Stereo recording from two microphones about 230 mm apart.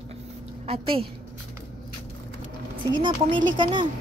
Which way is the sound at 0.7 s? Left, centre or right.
Right.